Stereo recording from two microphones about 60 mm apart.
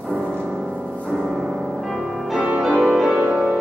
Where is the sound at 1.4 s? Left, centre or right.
Centre.